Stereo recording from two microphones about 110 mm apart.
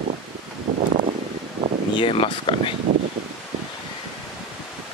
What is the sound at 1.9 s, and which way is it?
Speech, 55° left (ahead or behind).